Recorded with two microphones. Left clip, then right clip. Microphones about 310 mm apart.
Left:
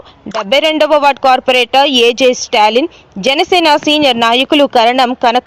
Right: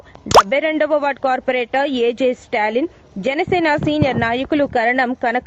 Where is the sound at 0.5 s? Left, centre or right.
Right.